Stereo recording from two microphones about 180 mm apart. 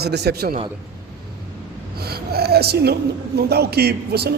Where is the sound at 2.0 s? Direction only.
60° right (ahead or behind).